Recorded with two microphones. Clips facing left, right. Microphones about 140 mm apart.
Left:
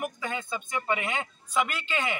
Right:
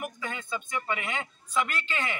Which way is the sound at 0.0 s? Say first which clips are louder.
Left 3 dB; 20° left (ahead or behind).